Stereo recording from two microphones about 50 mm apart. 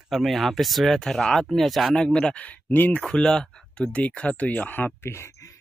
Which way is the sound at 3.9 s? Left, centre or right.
Left.